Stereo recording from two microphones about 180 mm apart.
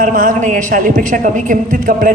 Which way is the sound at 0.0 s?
50° right (ahead or behind).